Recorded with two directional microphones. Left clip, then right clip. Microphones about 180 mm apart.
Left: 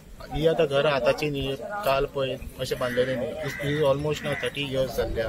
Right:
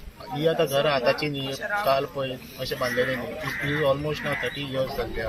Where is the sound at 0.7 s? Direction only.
40° left (ahead or behind).